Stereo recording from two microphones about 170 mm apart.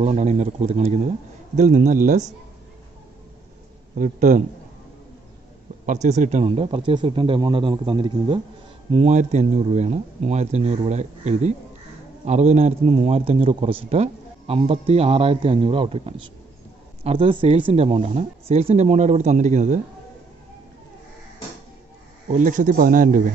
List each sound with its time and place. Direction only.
0.0 s a man's voice: 40° right (ahead or behind)
3.9 s speech: 50° right (ahead or behind)
5.9 s a man's voice: 40° right (ahead or behind)
8.9 s a man's voice: 45° right (ahead or behind)
22.3 s speech: 50° right (ahead or behind)